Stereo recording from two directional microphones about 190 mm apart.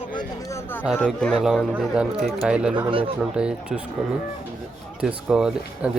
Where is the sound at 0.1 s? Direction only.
20° left (ahead or behind).